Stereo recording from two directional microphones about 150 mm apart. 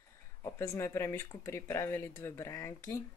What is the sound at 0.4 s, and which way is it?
Speech, 20° left (ahead or behind).